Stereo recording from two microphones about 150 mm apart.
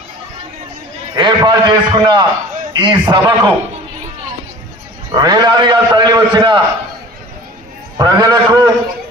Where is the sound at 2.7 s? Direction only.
30° right (ahead or behind).